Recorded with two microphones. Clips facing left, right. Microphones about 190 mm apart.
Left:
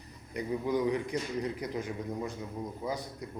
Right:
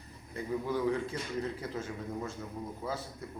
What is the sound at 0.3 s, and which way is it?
A man's voice, 15° left (ahead or behind).